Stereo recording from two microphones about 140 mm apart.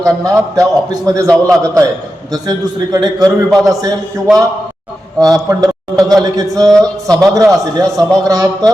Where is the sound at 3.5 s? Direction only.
Centre (ahead or behind).